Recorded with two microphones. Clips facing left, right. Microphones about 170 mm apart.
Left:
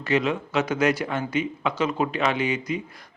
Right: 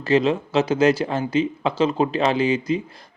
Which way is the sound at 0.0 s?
30° right (ahead or behind).